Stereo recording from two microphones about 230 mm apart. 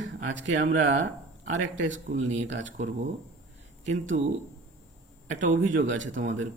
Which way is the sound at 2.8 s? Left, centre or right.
Right.